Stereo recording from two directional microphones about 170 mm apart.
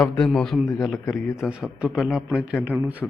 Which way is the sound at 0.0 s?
5° left (ahead or behind).